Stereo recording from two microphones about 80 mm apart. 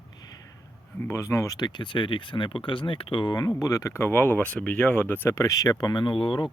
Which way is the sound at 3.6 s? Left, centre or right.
Left.